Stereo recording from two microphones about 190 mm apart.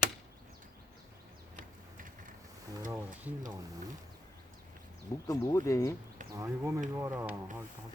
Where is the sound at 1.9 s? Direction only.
45° right (ahead or behind).